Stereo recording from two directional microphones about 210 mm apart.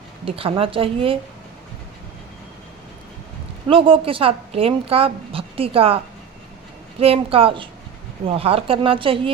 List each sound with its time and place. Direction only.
0.3 s speech: 25° right (ahead or behind)
3.7 s speech: 25° right (ahead or behind)
7.0 s speech: 25° right (ahead or behind)